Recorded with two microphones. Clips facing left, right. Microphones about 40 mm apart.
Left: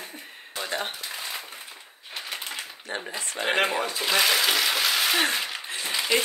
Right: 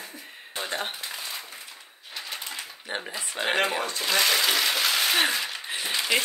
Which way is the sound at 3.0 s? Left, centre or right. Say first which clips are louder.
Left 1 dB; centre.